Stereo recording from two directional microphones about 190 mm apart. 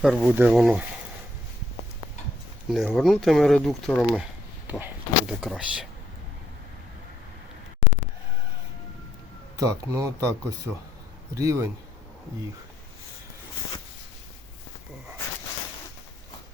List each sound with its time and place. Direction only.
0.0 s speech: centre (ahead or behind)
2.6 s speech: centre (ahead or behind)
9.6 s speech: 20° right (ahead or behind)
11.3 s speech: 15° right (ahead or behind)